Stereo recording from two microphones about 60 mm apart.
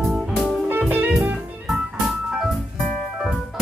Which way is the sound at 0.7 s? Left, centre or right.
Right.